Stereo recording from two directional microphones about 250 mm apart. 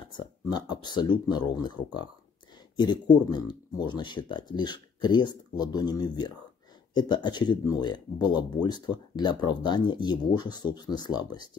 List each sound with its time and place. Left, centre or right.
0.5 s speech: centre